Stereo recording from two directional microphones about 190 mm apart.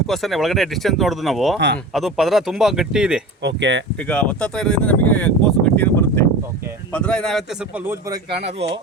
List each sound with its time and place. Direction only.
0.1 s speech: centre (ahead or behind)
1.5 s speech: 65° right (ahead or behind)
1.9 s speech: centre (ahead or behind)
3.4 s speech: 70° right (ahead or behind)
4.1 s speech: 5° left (ahead or behind)
8.4 s speech: 35° right (ahead or behind)